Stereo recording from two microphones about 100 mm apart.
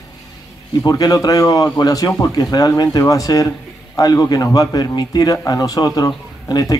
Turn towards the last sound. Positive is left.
turn(degrees=40)  # may be behind; listen again after turning